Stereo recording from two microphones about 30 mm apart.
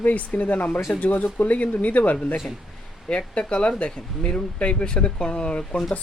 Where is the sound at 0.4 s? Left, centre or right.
Left.